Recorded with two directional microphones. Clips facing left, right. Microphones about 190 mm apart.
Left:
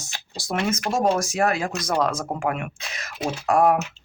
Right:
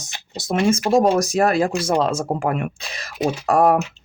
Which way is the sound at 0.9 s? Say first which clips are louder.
Right 5 dB; 35° right (ahead or behind).